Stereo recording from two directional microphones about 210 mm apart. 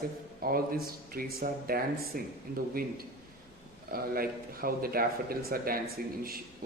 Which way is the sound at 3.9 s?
45° right (ahead or behind).